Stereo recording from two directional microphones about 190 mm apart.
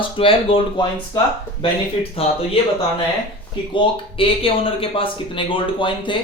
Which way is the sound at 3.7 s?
25° left (ahead or behind).